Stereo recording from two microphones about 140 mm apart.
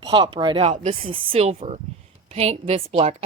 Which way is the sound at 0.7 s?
55° right (ahead or behind).